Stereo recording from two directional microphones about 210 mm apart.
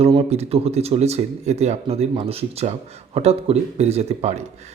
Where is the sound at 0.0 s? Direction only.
30° right (ahead or behind).